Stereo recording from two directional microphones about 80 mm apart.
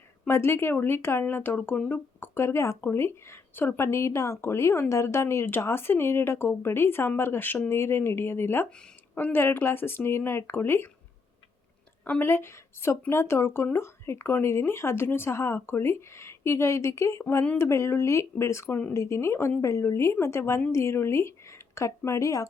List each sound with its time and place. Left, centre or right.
0.3 s speech: left
12.2 s speech: left